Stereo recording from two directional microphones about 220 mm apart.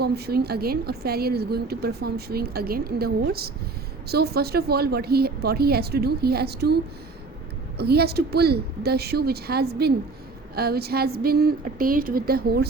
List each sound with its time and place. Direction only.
0.0 s a woman's voice: 45° right (ahead or behind)
7.8 s a woman's voice: 45° right (ahead or behind)